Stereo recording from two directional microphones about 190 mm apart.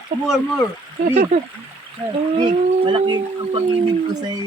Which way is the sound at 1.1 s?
50° right (ahead or behind).